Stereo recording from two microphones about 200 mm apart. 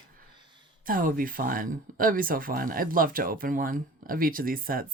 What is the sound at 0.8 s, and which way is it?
Speech, 45° right (ahead or behind).